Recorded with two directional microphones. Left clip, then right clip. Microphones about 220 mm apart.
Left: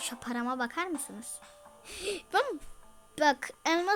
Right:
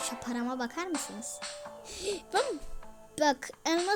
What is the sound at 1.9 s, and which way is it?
A woman's voice, 5° right (ahead or behind).